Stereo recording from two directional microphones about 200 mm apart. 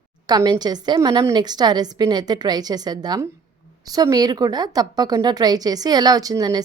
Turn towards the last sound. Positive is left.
turn(degrees=-20)  # may be behind; listen again after turning